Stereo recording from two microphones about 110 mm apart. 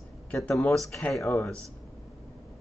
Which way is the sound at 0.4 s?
10° left (ahead or behind).